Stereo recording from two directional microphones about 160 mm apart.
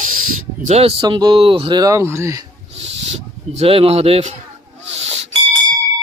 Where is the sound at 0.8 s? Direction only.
35° right (ahead or behind); by 2.4 s 15° right (ahead or behind).